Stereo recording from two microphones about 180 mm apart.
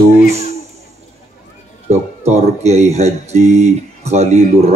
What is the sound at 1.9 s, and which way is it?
Speech, 40° right (ahead or behind).